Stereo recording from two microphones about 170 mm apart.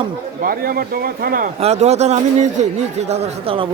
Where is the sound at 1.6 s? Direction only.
40° right (ahead or behind).